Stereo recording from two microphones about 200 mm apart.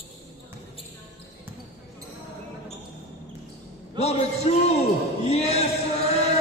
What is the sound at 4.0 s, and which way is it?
Speech, 30° left (ahead or behind).